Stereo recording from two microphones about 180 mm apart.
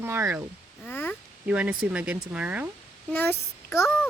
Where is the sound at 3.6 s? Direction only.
15° left (ahead or behind).